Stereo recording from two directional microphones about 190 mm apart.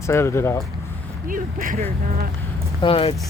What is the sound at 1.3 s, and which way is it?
Speech, 45° right (ahead or behind).